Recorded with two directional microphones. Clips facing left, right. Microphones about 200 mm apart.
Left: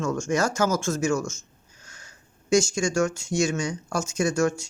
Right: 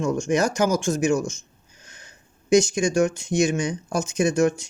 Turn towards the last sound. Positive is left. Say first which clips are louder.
# right 3 dB
turn(degrees=-15)  # may be behind; listen again after turning